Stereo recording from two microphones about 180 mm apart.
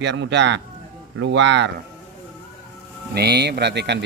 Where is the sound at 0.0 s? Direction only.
85° right.